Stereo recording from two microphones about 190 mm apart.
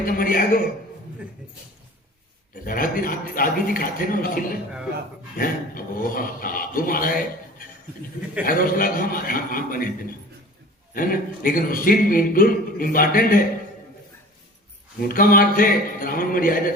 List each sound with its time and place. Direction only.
0.0 s a man's voice: 50° left (ahead or behind)
2.6 s a man's voice: 50° left (ahead or behind)
8.4 s a man's voice: 50° left (ahead or behind)
10.9 s a man's voice: 50° left (ahead or behind)
15.0 s a man's voice: 50° left (ahead or behind)